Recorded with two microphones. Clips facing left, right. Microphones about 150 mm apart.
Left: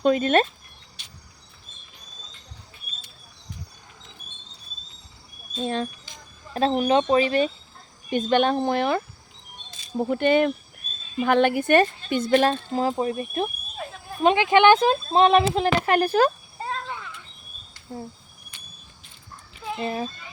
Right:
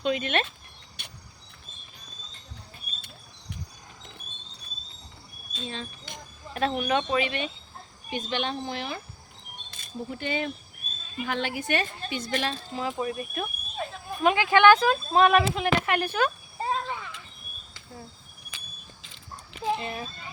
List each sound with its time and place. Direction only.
0.0 s speech: 40° left (ahead or behind)
1.0 s cricket: 60° right (ahead or behind)
5.6 s speech: 50° left (ahead or behind)
6.5 s speech: 30° left (ahead or behind)
8.1 s speech: 50° left (ahead or behind)
10.0 s speech: 60° left (ahead or behind); by 13.5 s 30° left (ahead or behind)
13.8 s a sound: centre (ahead or behind)
14.2 s speech: 25° left (ahead or behind)
16.6 s a sound: 5° right (ahead or behind)
18.5 s a sound: 90° right
19.8 s speech: 35° left (ahead or behind)